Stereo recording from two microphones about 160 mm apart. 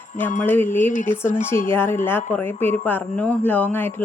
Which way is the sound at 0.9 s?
55° left (ahead or behind).